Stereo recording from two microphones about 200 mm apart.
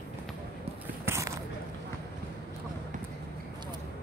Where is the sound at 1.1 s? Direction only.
15° right (ahead or behind).